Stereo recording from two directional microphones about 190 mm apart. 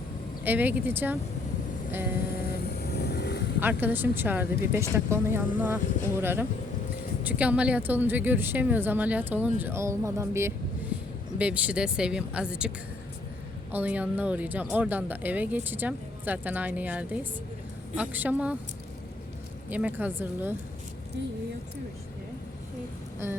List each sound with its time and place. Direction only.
0.4 s speech: 10° right (ahead or behind)
2.5 s vehicle: 55° left (ahead or behind)
3.6 s a woman's voice: 10° right (ahead or behind)
19.7 s speech: 10° right (ahead or behind)